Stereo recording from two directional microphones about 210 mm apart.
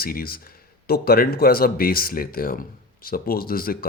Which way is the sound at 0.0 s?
45° left (ahead or behind).